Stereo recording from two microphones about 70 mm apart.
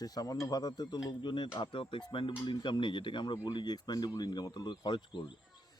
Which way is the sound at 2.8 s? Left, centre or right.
Left.